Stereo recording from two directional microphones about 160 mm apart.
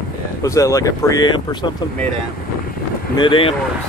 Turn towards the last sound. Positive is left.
turn(degrees=30)  # may be behind; listen again after turning